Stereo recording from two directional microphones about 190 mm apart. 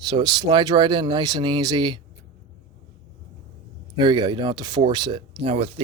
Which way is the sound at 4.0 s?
25° right (ahead or behind).